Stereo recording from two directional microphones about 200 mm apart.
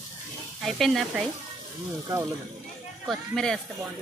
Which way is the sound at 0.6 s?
Centre (ahead or behind).